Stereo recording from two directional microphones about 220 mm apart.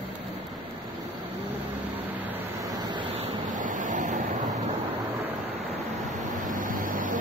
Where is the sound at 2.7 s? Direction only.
20° right (ahead or behind).